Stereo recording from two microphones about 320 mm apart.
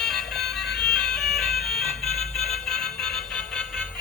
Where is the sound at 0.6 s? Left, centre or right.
Left.